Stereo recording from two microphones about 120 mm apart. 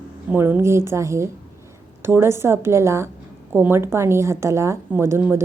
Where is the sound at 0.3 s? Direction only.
20° right (ahead or behind).